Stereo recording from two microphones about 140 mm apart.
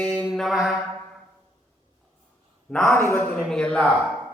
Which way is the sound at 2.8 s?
15° left (ahead or behind).